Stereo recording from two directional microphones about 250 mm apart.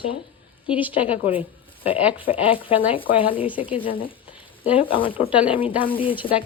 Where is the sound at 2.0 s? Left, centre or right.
Centre.